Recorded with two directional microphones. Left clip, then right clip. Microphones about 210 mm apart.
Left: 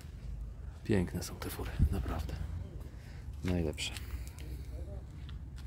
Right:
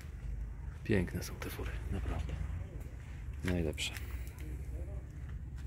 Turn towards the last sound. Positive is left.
turn(degrees=5)  # may be behind; listen again after turning